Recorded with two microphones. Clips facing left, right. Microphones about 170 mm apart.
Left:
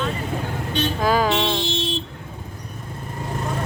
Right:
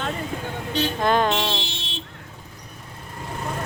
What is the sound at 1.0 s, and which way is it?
Speech, 5° left (ahead or behind).